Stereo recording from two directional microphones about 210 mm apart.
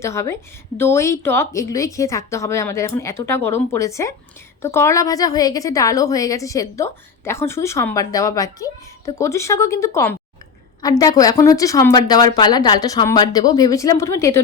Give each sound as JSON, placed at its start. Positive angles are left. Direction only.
{"t": 0.0, "sound": "a woman's voice", "side_deg": 15}